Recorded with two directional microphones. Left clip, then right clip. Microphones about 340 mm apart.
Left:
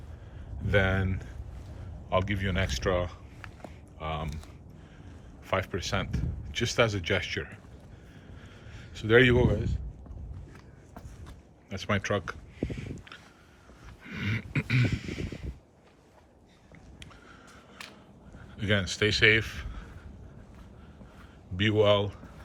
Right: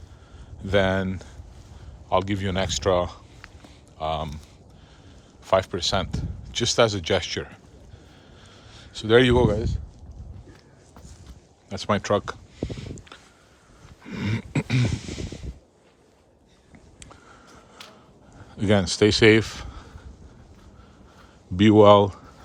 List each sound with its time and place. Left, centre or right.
0.6 s speech: centre
5.5 s speech: centre
8.7 s a man's voice: centre
11.7 s a sound: centre
17.0 s a sound: centre
18.5 s speech: centre
21.5 s speech: centre